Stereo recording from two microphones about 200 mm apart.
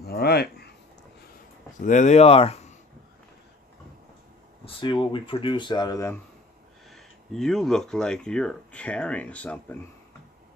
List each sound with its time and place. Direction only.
0.0 s a sound: 50° left (ahead or behind)
1.8 s speech: 40° left (ahead or behind)
4.6 s speech: 25° left (ahead or behind)
6.9 s speech: centre (ahead or behind)